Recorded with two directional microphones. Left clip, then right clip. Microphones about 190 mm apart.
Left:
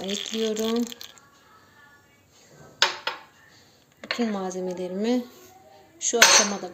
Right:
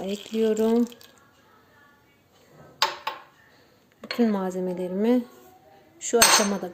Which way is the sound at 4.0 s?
25° right (ahead or behind).